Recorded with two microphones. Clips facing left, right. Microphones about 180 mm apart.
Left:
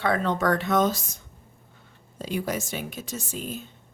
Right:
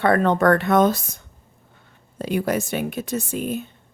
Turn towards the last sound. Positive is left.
turn(degrees=-60)  # may be behind; listen again after turning